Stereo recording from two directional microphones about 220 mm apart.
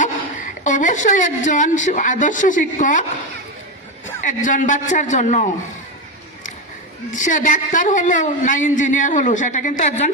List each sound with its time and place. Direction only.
0.0 s a woman's voice: 35° left (ahead or behind)
4.3 s a woman's voice: 35° left (ahead or behind)
7.1 s a woman's voice: 35° left (ahead or behind)